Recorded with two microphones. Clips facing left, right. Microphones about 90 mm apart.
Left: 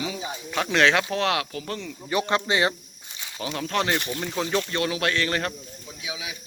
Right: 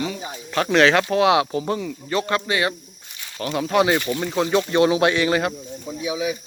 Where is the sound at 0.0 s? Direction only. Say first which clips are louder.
Right 3 dB; centre (ahead or behind).